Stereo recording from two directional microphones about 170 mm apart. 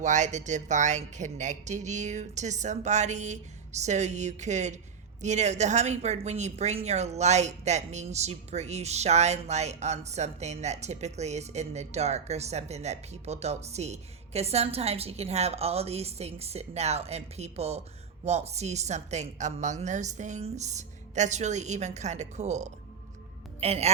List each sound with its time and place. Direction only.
0.0 s a woman's voice: 45° right (ahead or behind)